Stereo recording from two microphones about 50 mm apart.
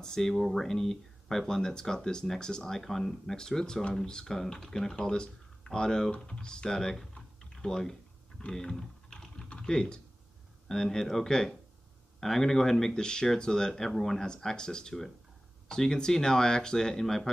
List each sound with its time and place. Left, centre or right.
0.0 s speech: centre
8.4 s typing: centre
10.7 s speech: centre